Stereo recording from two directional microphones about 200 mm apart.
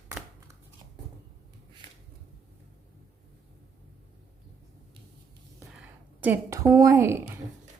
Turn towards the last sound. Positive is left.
turn(degrees=-15)  # may be behind; listen again after turning